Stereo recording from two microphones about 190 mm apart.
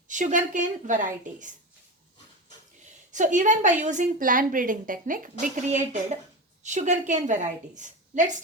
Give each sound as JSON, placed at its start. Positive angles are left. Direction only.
{"t": 0.1, "sound": "a woman's voice", "side_deg": -40}
{"t": 3.1, "sound": "a woman's voice", "side_deg": -40}